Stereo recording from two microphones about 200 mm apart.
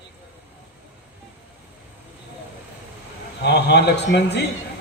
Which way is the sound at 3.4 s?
60° left (ahead or behind).